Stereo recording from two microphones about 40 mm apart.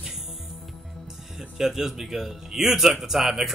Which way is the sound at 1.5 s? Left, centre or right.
Centre.